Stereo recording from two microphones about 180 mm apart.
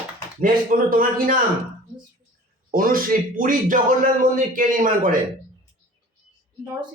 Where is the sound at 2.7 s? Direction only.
50° right (ahead or behind).